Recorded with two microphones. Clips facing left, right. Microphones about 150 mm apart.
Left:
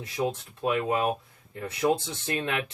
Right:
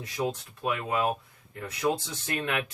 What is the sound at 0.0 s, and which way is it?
Speech, 30° left (ahead or behind).